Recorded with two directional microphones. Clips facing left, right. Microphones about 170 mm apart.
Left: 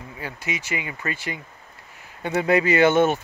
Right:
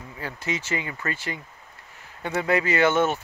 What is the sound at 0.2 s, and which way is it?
Speech, 15° left (ahead or behind).